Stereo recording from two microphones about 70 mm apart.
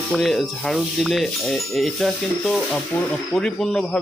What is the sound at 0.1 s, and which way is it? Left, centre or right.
A man's voice, centre.